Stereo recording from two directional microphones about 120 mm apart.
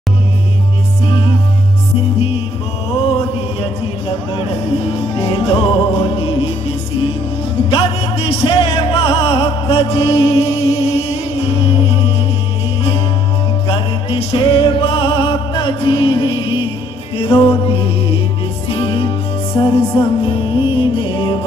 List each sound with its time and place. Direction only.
4.9 s music: 55° left (ahead or behind)
7.7 s music: 55° left (ahead or behind)
13.7 s music: 50° left (ahead or behind)
19.6 s music: 15° left (ahead or behind)
20.0 s music: 45° left (ahead or behind)